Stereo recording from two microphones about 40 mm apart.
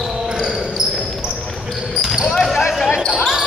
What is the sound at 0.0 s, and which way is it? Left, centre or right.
Basketball bounce, centre.